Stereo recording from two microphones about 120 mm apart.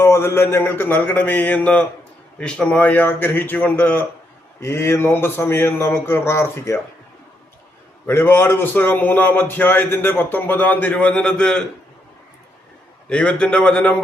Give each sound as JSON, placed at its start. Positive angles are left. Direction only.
{"t": 0.0, "sound": "a man's voice", "side_deg": 20}
{"t": 8.0, "sound": "a man's voice", "side_deg": 20}
{"t": 13.1, "sound": "a man's voice", "side_deg": 10}